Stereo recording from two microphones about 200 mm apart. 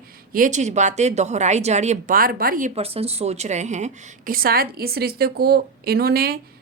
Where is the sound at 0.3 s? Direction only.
40° right (ahead or behind).